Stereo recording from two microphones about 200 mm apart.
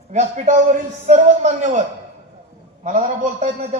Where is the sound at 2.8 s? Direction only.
40° right (ahead or behind).